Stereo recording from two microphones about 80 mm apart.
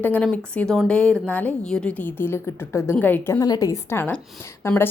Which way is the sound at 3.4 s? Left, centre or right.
Left.